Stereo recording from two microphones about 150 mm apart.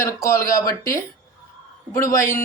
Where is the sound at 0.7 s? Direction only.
20° left (ahead or behind).